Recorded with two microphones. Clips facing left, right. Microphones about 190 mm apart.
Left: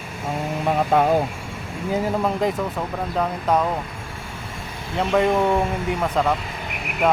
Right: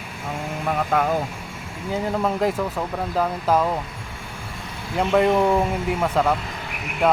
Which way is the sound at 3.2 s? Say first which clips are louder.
Even; centre (ahead or behind).